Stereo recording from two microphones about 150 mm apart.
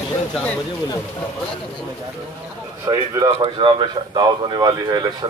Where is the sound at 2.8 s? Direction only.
25° right (ahead or behind).